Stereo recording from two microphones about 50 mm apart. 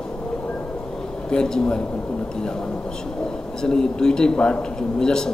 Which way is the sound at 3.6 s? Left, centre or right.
Centre.